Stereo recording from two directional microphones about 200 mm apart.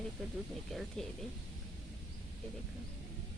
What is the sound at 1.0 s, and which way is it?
Speech, centre (ahead or behind).